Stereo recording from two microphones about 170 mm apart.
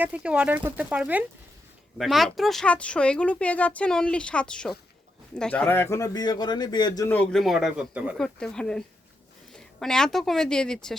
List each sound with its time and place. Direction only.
0.0 s speech: 5° right (ahead or behind); by 7.1 s 25° left (ahead or behind)
7.1 s speech: 5° left (ahead or behind)